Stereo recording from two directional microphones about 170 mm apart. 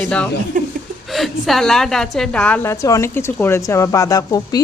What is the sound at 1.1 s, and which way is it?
A woman's voice, centre (ahead or behind).